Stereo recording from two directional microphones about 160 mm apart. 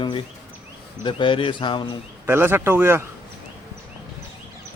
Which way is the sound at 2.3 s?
15° right (ahead or behind).